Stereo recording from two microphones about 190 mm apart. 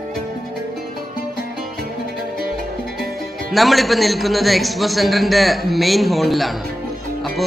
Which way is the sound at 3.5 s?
Centre (ahead or behind).